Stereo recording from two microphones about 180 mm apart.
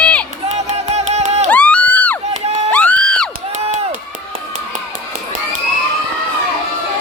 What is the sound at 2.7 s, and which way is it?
Music, 5° left (ahead or behind).